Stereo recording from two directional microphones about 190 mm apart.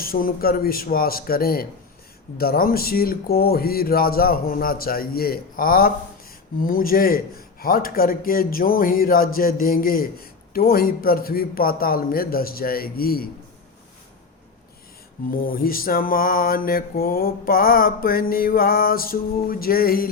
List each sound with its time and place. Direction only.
0.0 s mantra: 50° left (ahead or behind)
15.3 s mantra: 50° left (ahead or behind)